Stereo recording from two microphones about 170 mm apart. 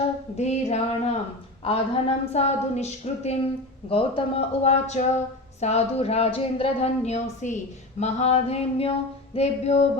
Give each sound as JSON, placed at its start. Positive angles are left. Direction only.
{"t": 0.3, "sound": "a woman's voice", "side_deg": 40}